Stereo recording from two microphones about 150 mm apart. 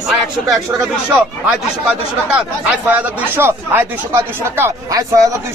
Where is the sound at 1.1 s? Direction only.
5° right (ahead or behind).